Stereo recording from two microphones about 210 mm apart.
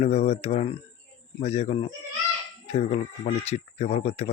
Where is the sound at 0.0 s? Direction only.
30° left (ahead or behind).